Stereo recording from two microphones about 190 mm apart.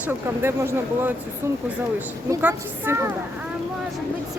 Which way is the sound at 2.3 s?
10° right (ahead or behind).